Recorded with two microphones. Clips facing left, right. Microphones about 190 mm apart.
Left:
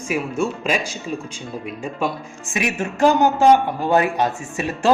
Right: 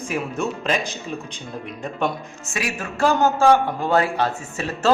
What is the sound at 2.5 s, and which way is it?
Speech, 20° left (ahead or behind).